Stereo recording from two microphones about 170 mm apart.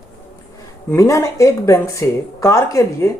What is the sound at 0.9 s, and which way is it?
Speech, 15° left (ahead or behind).